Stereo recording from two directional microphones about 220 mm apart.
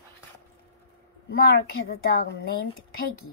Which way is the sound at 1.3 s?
45° left (ahead or behind).